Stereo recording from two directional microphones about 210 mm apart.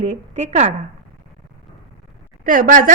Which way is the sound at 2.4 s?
40° right (ahead or behind).